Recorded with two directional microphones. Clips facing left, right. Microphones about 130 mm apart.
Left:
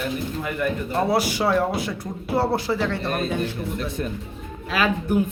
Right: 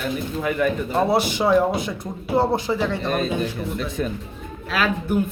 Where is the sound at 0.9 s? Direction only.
25° right (ahead or behind).